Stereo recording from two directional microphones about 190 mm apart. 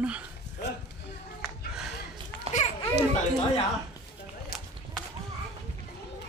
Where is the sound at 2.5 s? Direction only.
30° right (ahead or behind).